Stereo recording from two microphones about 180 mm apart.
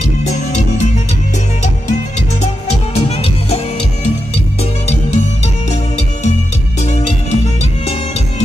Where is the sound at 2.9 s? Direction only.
35° left (ahead or behind).